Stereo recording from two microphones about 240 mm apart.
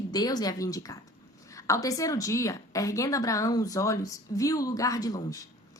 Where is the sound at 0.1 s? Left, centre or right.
Centre.